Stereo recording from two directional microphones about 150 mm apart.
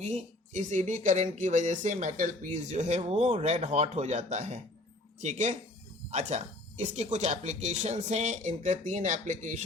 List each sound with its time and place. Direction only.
0.0 s speech: 50° right (ahead or behind)